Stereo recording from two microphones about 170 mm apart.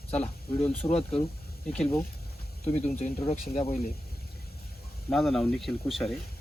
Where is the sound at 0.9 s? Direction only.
35° left (ahead or behind).